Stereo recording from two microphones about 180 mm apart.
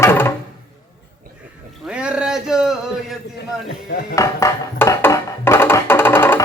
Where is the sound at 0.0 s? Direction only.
10° left (ahead or behind).